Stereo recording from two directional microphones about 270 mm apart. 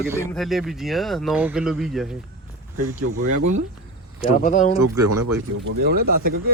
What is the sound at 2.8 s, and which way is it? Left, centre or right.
Speech, right.